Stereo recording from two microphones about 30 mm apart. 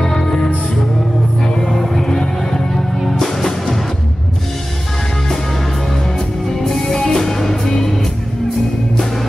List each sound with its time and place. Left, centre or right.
0.0 s music: centre
6.1 s music: centre